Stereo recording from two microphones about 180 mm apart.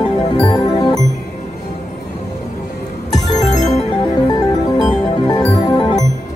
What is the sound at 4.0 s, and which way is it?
Music, 25° left (ahead or behind).